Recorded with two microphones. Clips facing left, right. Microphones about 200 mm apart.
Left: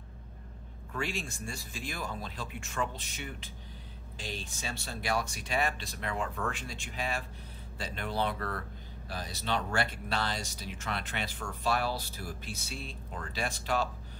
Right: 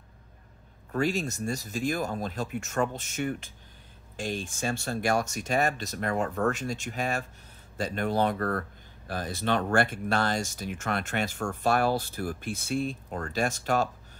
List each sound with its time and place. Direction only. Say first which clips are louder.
0.9 s speech: right 9 dB; 40° right (ahead or behind)